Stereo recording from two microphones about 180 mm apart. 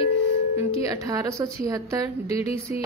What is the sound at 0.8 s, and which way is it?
A woman's voice, 20° right (ahead or behind).